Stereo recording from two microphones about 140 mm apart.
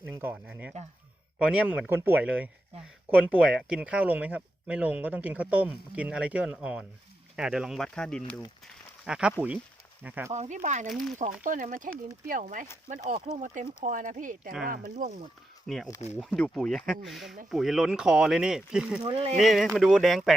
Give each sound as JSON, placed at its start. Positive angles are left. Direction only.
{"t": 0.0, "sound": "speech", "side_deg": -15}
{"t": 8.6, "sound": "a sound", "side_deg": -5}
{"t": 10.0, "sound": "speech", "side_deg": -10}
{"t": 10.3, "sound": "speech", "side_deg": -55}
{"t": 11.2, "sound": "speech", "side_deg": -70}
{"t": 15.6, "sound": "speech", "side_deg": 0}
{"t": 19.0, "sound": "speech", "side_deg": -40}
{"t": 19.4, "sound": "speech", "side_deg": 0}